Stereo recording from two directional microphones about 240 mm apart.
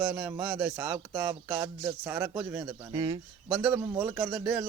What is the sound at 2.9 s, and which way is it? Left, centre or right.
Speech, centre.